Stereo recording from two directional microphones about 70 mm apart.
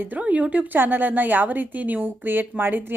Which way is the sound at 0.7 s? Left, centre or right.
Right.